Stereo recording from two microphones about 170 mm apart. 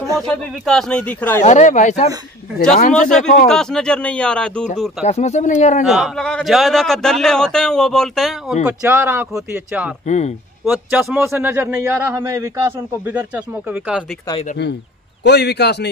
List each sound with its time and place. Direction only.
0.0 s a sound: 20° right (ahead or behind)
0.3 s speech: 5° left (ahead or behind)
1.4 s speech: 45° left (ahead or behind)
2.9 s a man's voice: 5° left (ahead or behind)
5.0 s speech: 40° left (ahead or behind)
5.9 s a man's voice: centre (ahead or behind)
8.6 s a man's voice: 15° right (ahead or behind)
10.0 s speech: 45° left (ahead or behind)
10.7 s a man's voice: 5° right (ahead or behind)
15.2 s a man's voice: 75° left (ahead or behind)